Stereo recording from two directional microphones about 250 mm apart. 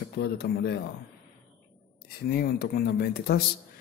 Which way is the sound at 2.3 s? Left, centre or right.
Left.